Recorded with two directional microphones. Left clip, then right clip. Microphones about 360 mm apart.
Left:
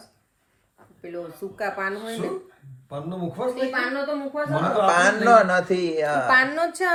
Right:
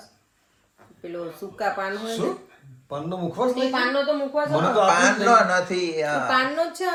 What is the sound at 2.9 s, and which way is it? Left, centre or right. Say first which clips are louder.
Speech: right 3 dB; centre.